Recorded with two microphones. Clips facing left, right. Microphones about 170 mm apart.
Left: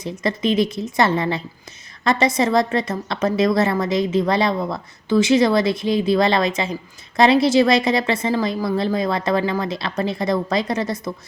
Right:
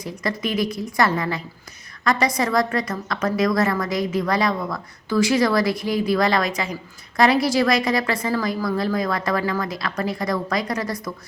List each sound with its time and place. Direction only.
0.0 s a woman's voice: 25° left (ahead or behind)